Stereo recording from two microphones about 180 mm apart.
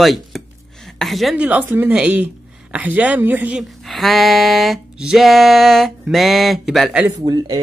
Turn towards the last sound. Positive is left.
turn(degrees=-20)  # may be behind; listen again after turning